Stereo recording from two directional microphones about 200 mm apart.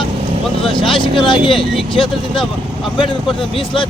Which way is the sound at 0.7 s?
25° left (ahead or behind).